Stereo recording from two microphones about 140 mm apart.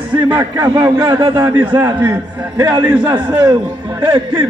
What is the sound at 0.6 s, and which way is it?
A man's voice, 30° right (ahead or behind).